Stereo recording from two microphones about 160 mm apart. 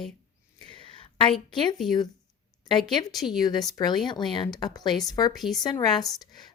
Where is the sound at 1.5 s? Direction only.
30° left (ahead or behind).